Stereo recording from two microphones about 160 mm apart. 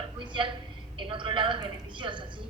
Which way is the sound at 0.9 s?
30° right (ahead or behind).